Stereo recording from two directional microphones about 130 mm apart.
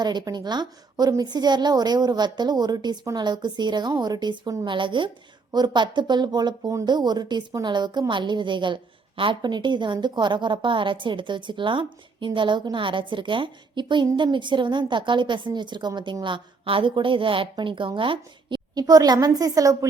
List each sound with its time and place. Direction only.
0.0 s a woman's voice: 35° right (ahead or behind)